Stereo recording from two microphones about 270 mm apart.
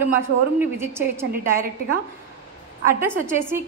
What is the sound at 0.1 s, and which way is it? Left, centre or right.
A woman's voice, centre.